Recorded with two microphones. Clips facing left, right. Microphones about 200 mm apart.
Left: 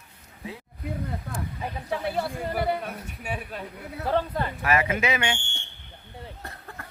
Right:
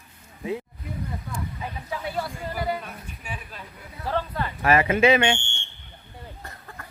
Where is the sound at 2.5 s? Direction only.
60° left (ahead or behind).